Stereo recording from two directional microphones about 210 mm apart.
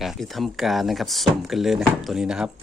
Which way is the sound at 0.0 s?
Centre (ahead or behind).